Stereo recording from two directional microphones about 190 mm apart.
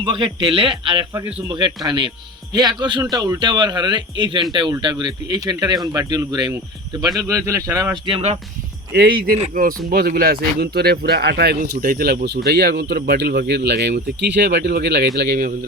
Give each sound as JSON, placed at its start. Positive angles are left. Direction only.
{"t": 0.0, "sound": "speech", "side_deg": -25}
{"t": 8.9, "sound": "speech", "side_deg": -55}